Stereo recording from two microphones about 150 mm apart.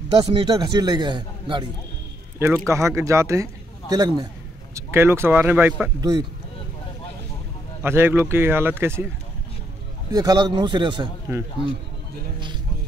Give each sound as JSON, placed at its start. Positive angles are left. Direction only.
{"t": 0.3, "sound": "a man's voice", "side_deg": -35}
{"t": 2.3, "sound": "speech", "side_deg": -15}
{"t": 5.9, "sound": "speech", "side_deg": -25}
{"t": 7.8, "sound": "speech", "side_deg": -15}
{"t": 10.1, "sound": "a man's voice", "side_deg": -25}